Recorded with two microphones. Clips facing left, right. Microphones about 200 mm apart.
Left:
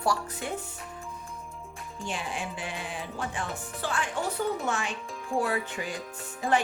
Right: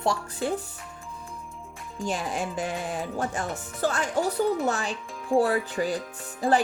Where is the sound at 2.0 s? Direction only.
40° right (ahead or behind).